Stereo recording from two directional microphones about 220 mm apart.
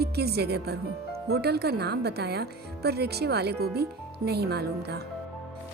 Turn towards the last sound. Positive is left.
turn(degrees=-45)  # may be behind; listen again after turning